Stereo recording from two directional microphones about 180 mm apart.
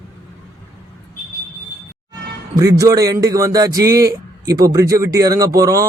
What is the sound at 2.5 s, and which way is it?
Speech, 20° right (ahead or behind).